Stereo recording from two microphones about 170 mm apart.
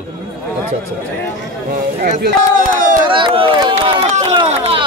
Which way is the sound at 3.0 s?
30° right (ahead or behind).